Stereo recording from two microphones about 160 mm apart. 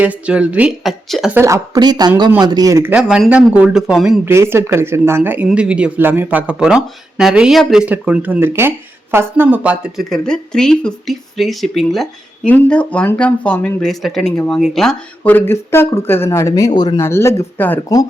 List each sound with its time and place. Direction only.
0.0 s speech: 10° right (ahead or behind)
1.4 s speech: 20° right (ahead or behind)
2.9 s speech: 5° right (ahead or behind)
4.3 s speech: 15° right (ahead or behind); by 17.9 s 15° left (ahead or behind)